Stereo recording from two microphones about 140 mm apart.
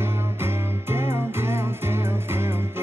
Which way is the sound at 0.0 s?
15° right (ahead or behind).